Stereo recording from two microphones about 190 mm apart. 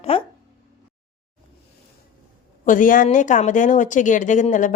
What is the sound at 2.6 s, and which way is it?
Speech, 45° left (ahead or behind).